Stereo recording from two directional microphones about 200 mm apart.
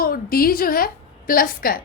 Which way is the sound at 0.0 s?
50° left (ahead or behind).